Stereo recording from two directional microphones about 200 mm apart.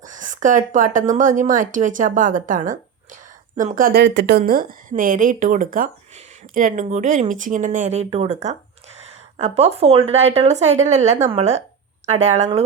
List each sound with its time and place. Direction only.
0.0 s a woman's voice: 40° right (ahead or behind)